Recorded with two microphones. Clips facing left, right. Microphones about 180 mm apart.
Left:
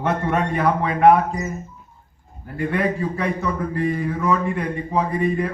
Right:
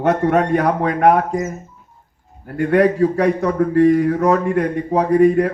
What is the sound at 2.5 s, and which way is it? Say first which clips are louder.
A man's voice: right 8 dB; 75° right (ahead or behind).